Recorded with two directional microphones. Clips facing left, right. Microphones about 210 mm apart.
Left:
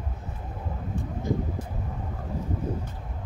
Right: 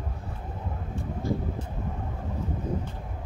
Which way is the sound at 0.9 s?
20° left (ahead or behind).